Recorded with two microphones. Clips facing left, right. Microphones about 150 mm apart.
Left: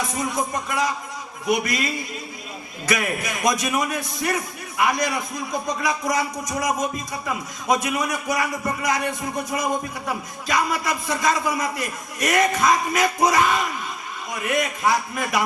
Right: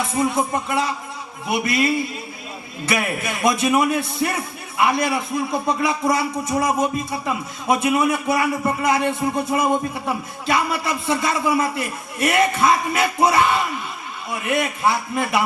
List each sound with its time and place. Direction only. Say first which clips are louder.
0.3 s a man's voice: right 3 dB; 30° right (ahead or behind)